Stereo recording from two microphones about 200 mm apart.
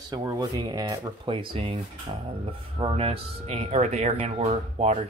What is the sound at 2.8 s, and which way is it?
Speech, 30° right (ahead or behind).